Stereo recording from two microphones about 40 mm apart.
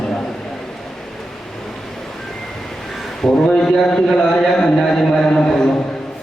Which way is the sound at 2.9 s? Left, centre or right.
Centre.